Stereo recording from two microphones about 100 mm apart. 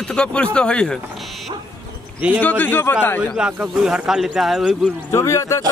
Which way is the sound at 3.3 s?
5° right (ahead or behind).